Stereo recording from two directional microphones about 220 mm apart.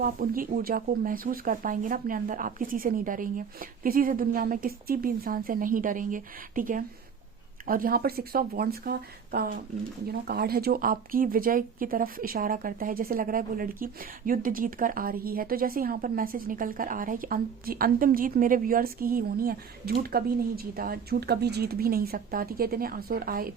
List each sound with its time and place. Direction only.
0.0 s speech: 40° right (ahead or behind)